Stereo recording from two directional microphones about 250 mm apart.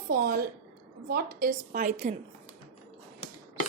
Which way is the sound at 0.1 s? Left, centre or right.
Right.